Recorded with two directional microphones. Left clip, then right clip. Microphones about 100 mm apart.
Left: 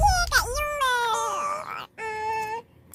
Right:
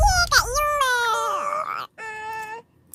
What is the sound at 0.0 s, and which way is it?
Baby cry, 15° right (ahead or behind).